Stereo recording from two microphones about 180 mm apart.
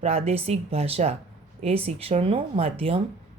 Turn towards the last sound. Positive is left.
turn(degrees=-30)  # may be behind; listen again after turning